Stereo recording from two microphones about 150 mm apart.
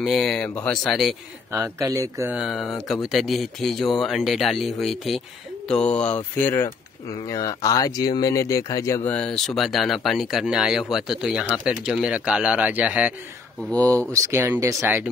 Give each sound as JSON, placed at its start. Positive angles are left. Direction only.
{"t": 0.0, "sound": "speech", "side_deg": 0}
{"t": 1.5, "sound": "speech", "side_deg": -20}
{"t": 2.3, "sound": "speech", "side_deg": 0}
{"t": 9.1, "sound": "speech", "side_deg": 5}
{"t": 13.6, "sound": "speech", "side_deg": 10}
{"t": 14.1, "sound": "speech", "side_deg": -20}